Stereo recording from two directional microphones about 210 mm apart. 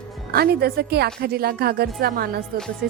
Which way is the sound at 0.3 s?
50° right (ahead or behind).